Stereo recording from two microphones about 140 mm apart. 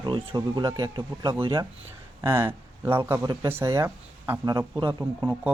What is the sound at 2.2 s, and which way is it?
A man's voice, 15° right (ahead or behind).